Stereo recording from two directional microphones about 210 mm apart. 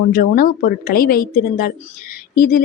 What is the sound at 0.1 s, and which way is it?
A woman's voice, 45° left (ahead or behind).